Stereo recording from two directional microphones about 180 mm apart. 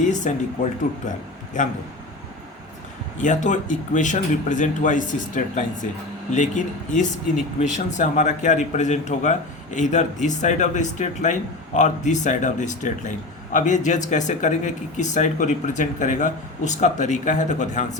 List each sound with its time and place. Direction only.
0.0 s a man's voice: 45° left (ahead or behind)
3.2 s a man's voice: 45° left (ahead or behind)